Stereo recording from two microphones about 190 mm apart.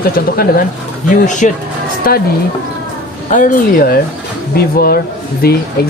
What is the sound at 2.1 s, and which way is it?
Speech, 50° left (ahead or behind).